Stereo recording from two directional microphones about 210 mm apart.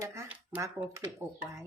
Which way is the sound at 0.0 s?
15° right (ahead or behind).